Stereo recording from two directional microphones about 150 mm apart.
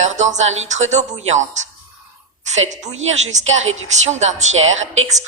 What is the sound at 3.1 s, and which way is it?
A woman's voice, 50° right (ahead or behind).